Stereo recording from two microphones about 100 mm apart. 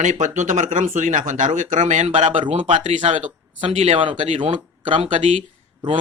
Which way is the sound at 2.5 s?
65° right (ahead or behind).